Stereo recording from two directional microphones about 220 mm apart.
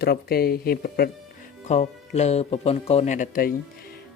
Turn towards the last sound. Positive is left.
turn(degrees=35)  # may be behind; listen again after turning